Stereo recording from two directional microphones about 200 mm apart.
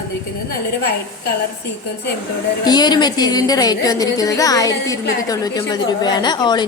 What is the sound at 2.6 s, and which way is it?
Speech, 20° left (ahead or behind).